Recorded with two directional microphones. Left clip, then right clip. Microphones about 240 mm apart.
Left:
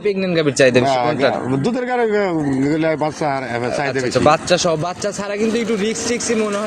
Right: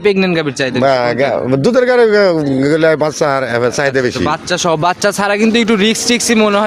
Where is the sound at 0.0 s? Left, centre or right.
Right.